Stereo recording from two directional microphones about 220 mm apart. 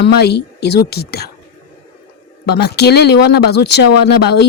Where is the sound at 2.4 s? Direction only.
50° left (ahead or behind).